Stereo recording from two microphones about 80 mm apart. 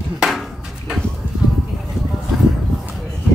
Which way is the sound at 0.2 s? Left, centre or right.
Centre.